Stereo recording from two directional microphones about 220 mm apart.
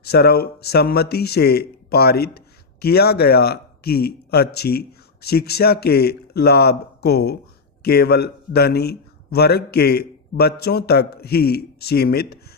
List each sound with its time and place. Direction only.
0.0 s a man's voice: 45° left (ahead or behind)